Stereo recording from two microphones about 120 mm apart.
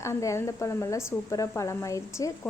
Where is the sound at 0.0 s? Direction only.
25° left (ahead or behind).